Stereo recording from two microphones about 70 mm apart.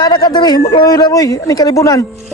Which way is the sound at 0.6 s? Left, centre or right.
Left.